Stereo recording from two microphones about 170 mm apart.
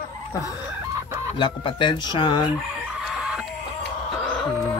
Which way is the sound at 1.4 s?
30° left (ahead or behind).